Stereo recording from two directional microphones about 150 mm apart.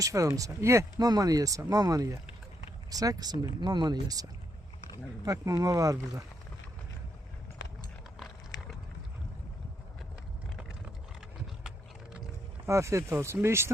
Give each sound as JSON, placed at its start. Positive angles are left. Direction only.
{"t": 0.0, "sound": "speech", "side_deg": -20}
{"t": 12.6, "sound": "speech", "side_deg": -20}